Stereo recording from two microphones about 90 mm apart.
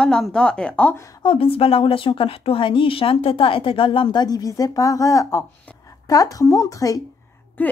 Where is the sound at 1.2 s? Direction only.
80° left; by 7.0 s 40° left (ahead or behind).